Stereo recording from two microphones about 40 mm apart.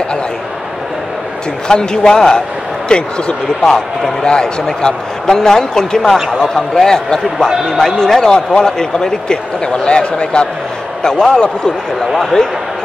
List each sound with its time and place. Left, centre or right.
1.7 s a man's voice: centre